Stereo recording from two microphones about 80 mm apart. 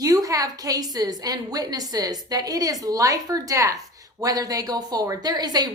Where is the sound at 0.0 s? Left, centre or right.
Right.